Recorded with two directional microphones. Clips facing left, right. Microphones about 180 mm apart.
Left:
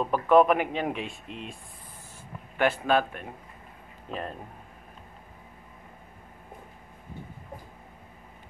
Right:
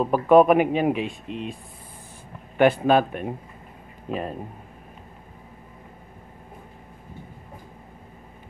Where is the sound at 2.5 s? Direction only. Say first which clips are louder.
Right 6 dB; 20° right (ahead or behind).